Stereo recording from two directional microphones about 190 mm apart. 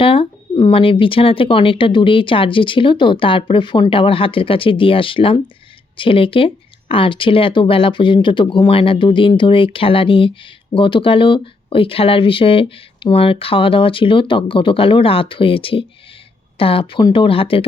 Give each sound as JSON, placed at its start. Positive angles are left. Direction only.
{"t": 0.0, "sound": "speech", "side_deg": 30}